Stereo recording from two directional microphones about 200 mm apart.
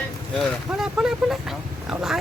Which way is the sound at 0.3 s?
Centre (ahead or behind).